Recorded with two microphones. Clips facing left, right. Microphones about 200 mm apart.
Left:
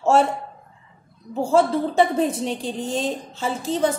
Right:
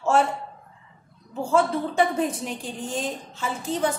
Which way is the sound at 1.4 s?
30° left (ahead or behind).